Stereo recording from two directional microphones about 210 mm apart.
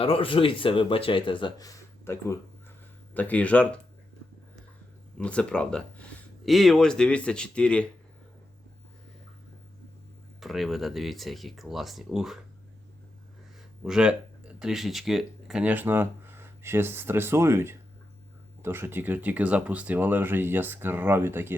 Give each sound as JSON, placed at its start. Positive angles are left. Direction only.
{"t": 0.0, "sound": "speech", "side_deg": 25}
{"t": 5.1, "sound": "speech", "side_deg": 5}
{"t": 10.4, "sound": "speech", "side_deg": 0}
{"t": 13.8, "sound": "speech", "side_deg": -5}